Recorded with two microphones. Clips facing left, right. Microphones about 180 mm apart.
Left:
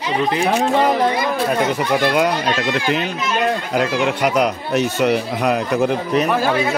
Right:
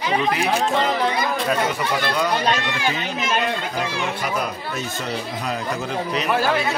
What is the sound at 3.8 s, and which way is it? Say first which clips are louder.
Speech: left 7 dB; 80° left.